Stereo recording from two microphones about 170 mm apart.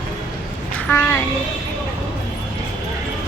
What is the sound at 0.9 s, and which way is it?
Speech, 15° left (ahead or behind).